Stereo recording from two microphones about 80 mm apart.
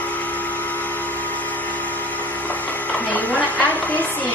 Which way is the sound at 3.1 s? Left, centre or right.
Left.